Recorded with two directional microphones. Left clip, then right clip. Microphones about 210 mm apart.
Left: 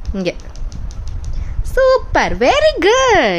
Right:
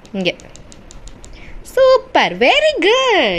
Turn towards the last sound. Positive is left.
turn(degrees=25)  # may be behind; listen again after turning